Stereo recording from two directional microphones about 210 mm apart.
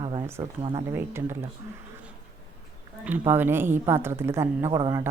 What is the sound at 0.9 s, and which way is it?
Speech, 10° right (ahead or behind).